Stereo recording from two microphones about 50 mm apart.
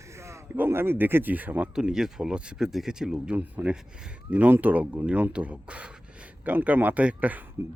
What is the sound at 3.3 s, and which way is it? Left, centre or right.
Speech, right.